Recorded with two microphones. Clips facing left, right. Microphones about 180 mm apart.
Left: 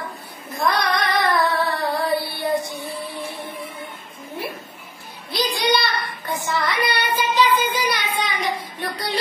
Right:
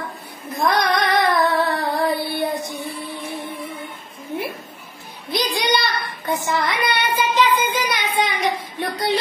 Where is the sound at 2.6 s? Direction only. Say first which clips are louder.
Right 1 dB; 20° right (ahead or behind).